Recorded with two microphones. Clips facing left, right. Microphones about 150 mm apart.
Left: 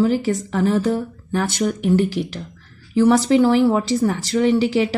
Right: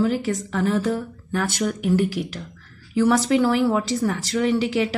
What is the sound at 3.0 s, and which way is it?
Speech, 25° left (ahead or behind).